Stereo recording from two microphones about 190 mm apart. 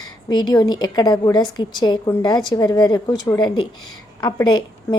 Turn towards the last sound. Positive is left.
turn(degrees=20)  # may be behind; listen again after turning